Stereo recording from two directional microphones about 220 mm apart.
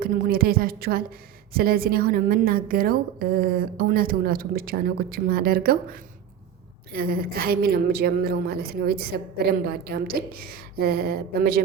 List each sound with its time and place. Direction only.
0.0 s a woman's voice: 40° right (ahead or behind)